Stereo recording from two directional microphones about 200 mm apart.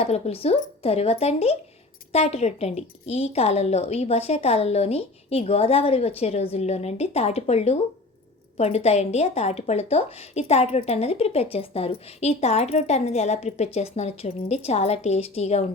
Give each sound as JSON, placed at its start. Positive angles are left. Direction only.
{"t": 0.0, "sound": "a woman's voice", "side_deg": 30}